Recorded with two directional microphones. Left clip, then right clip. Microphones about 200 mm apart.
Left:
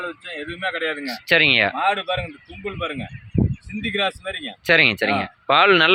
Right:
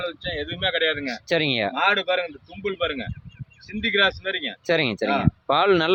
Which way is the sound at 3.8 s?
25° right (ahead or behind).